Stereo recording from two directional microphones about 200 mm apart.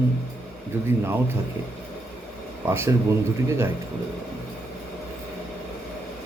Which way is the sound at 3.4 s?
10° right (ahead or behind).